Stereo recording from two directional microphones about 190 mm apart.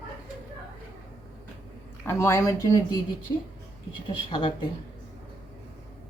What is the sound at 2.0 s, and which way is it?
Speech, 15° left (ahead or behind).